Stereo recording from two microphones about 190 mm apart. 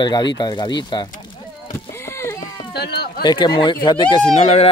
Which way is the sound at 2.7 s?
55° left (ahead or behind).